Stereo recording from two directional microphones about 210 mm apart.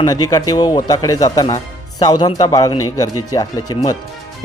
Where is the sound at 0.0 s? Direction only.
15° left (ahead or behind).